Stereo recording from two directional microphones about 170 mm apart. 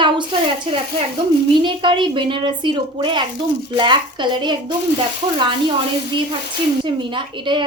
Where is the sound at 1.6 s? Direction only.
30° right (ahead or behind).